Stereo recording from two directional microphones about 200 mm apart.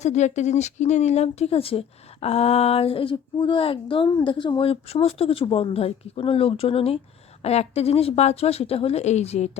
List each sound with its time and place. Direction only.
0.0 s speech: 35° left (ahead or behind)